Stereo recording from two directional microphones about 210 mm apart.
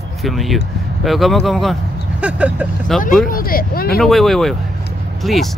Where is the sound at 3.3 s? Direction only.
45° left (ahead or behind).